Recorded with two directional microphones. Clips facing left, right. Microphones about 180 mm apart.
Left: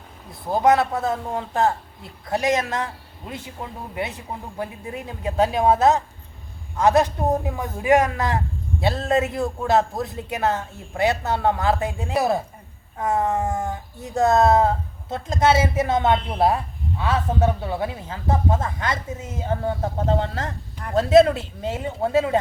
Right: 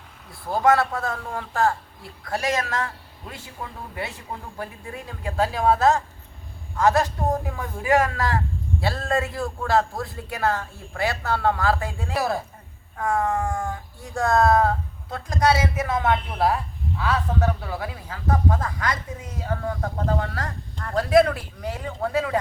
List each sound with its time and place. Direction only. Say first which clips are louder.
0.3 s a man's voice: left 2 dB; 20° left (ahead or behind)